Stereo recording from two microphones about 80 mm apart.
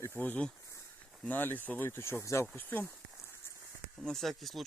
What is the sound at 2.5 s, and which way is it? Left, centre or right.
Speech, left.